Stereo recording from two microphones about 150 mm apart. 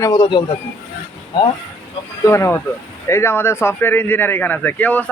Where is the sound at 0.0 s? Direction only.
30° left (ahead or behind).